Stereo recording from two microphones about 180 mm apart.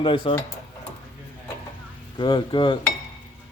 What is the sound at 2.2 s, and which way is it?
Speech, 25° left (ahead or behind).